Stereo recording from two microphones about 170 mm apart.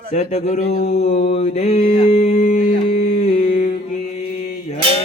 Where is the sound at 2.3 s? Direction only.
55° left (ahead or behind).